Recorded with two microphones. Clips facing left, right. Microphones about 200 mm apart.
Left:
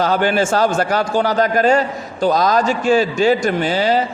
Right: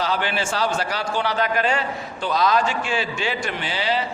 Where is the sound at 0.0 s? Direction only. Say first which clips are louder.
Left 8 dB; 45° left (ahead or behind).